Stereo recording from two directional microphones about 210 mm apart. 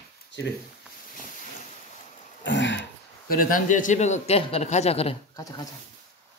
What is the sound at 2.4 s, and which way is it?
Throat clearing, 60° left (ahead or behind).